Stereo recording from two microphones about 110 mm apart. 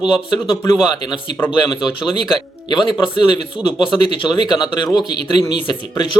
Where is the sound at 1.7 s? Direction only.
45° left (ahead or behind).